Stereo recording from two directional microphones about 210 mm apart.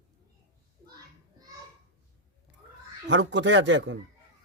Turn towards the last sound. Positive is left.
turn(degrees=-60)  # may be behind; listen again after turning